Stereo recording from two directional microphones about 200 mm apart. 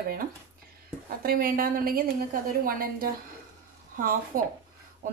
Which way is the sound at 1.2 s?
45° right (ahead or behind).